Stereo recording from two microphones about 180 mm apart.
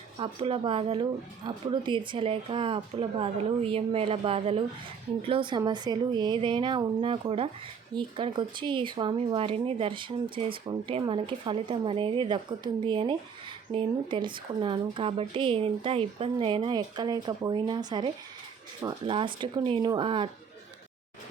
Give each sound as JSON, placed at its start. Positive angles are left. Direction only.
{"t": 0.2, "sound": "speech", "side_deg": -30}